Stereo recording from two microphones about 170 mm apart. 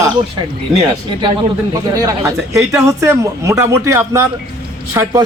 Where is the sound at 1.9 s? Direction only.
20° right (ahead or behind).